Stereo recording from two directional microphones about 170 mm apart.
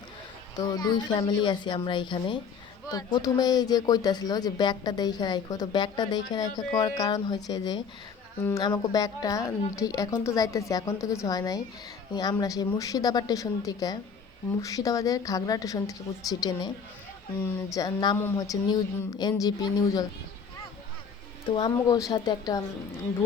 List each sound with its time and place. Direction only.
0.5 s speech: 20° left (ahead or behind)
8.6 s speech: 25° left (ahead or behind)
17.7 s speech: 25° left (ahead or behind)
21.5 s speech: 25° left (ahead or behind)